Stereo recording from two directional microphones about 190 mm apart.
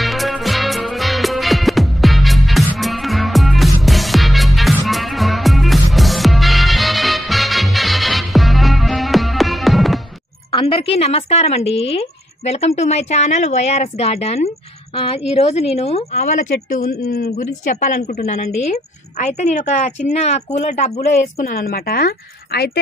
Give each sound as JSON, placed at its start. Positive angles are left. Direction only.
{"t": 0.0, "sound": "music", "side_deg": 0}
{"t": 10.5, "sound": "a woman's voice", "side_deg": 30}
{"t": 17.4, "sound": "a woman's voice", "side_deg": 40}